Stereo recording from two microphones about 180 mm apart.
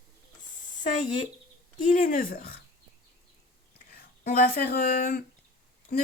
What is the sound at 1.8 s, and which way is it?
Speech, 50° left (ahead or behind).